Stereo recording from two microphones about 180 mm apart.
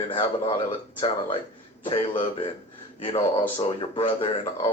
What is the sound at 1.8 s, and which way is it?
Speech, 30° left (ahead or behind).